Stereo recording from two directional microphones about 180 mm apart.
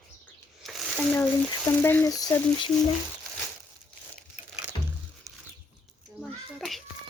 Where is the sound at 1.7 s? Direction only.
10° left (ahead or behind).